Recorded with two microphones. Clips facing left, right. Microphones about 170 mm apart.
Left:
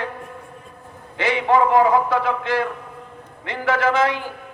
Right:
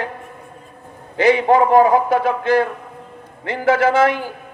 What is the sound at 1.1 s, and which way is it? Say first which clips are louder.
A man's voice: right 5 dB; 40° right (ahead or behind).